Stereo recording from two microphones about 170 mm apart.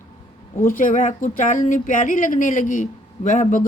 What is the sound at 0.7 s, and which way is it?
Speech, 50° left (ahead or behind).